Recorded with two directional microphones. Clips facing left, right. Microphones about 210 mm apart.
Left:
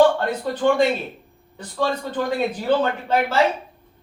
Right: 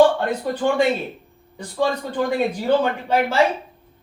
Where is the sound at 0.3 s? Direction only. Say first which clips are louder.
Left 1 dB; 10° right (ahead or behind).